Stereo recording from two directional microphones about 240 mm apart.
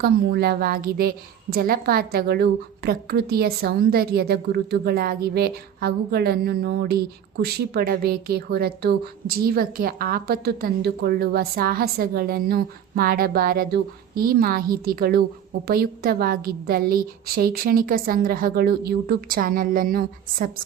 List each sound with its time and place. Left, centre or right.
0.0 s a woman's voice: right